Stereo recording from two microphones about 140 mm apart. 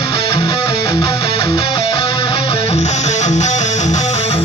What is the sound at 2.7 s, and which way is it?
Music, 50° left (ahead or behind).